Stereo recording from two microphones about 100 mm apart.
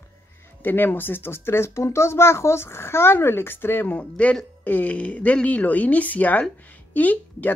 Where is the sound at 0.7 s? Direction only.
20° left (ahead or behind).